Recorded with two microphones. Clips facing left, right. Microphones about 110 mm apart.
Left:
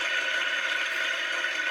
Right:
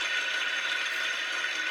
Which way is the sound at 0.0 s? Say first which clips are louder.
Left 3 dB; 45° left (ahead or behind).